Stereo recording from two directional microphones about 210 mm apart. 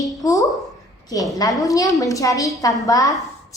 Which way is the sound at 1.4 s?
15° left (ahead or behind).